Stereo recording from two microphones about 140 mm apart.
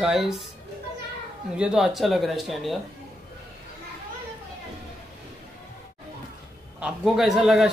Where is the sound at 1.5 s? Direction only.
5° right (ahead or behind).